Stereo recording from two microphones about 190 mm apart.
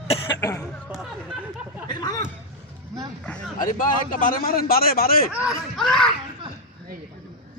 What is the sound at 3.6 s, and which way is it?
Speech, 45° left (ahead or behind).